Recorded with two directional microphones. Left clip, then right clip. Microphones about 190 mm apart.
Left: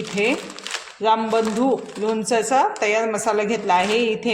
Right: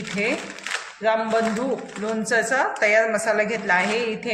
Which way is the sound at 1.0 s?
55° left (ahead or behind).